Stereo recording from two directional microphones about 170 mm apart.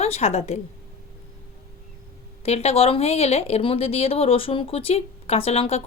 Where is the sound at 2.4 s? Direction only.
40° left (ahead or behind).